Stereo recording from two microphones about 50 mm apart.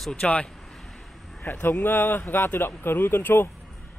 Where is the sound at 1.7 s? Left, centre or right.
Left.